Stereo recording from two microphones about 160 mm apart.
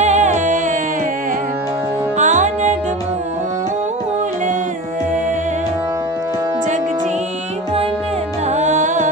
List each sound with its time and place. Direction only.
0.0 s music: 45° right (ahead or behind)
2.1 s music: 50° right (ahead or behind)
8.5 s music: 50° right (ahead or behind)